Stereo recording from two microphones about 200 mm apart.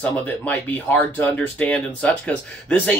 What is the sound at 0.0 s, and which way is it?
Speech, 5° left (ahead or behind).